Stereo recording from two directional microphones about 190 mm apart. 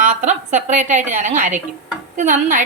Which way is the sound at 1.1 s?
40° right (ahead or behind).